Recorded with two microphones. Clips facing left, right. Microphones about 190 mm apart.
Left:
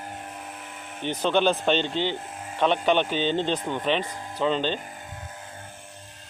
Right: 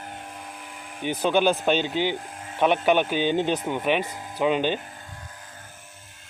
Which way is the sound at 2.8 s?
10° right (ahead or behind).